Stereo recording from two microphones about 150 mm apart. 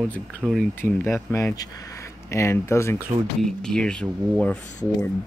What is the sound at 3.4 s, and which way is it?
Speech, 5° left (ahead or behind).